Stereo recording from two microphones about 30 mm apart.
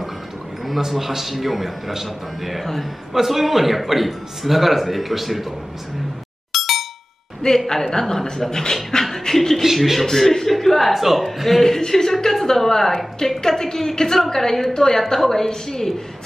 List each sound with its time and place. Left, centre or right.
0.7 s a man's voice: centre
2.6 s a woman's voice: centre
3.1 s a man's voice: centre
6.5 s clang: centre
7.4 s a woman's voice: centre
9.6 s a man's voice: centre
10.0 s a woman's voice: centre
10.9 s a man's voice: centre
11.6 s a woman's voice: centre